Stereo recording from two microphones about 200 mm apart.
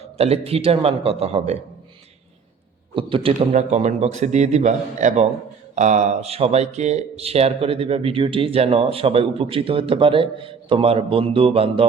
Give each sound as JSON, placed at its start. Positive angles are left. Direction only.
{"t": 0.0, "sound": "speech", "side_deg": -30}
{"t": 2.9, "sound": "a man's voice", "side_deg": -25}